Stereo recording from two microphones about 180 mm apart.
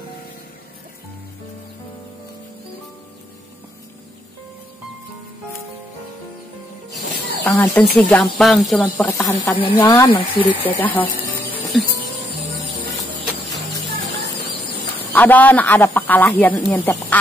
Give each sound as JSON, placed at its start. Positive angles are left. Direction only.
{"t": 7.4, "sound": "speech", "side_deg": 10}
{"t": 8.8, "sound": "speech", "side_deg": 15}
{"t": 10.6, "sound": "speech", "side_deg": 10}
{"t": 15.1, "sound": "speech", "side_deg": 10}